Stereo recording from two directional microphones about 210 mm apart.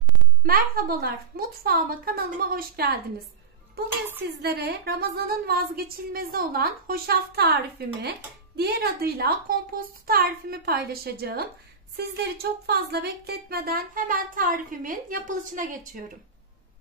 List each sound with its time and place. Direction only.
0.4 s a woman's voice: 45° right (ahead or behind)
4.4 s a woman's voice: 50° right (ahead or behind)
8.5 s a woman's voice: 50° right (ahead or behind)